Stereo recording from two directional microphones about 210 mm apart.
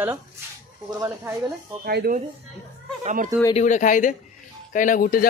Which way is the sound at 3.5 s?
35° left (ahead or behind).